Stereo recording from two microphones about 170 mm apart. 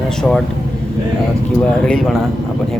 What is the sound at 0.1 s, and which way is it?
Speech, 5° left (ahead or behind).